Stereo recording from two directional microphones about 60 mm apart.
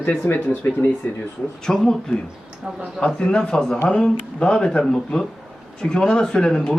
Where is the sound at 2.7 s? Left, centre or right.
Centre.